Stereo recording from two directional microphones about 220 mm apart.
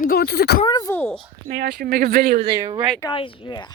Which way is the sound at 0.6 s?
15° left (ahead or behind).